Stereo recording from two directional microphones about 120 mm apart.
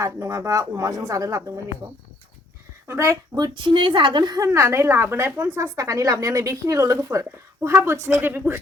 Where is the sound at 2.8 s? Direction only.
25° right (ahead or behind).